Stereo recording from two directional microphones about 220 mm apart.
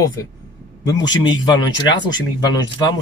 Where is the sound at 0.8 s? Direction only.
20° left (ahead or behind).